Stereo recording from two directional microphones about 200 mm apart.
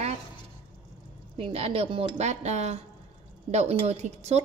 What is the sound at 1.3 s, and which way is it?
Speech, 30° right (ahead or behind).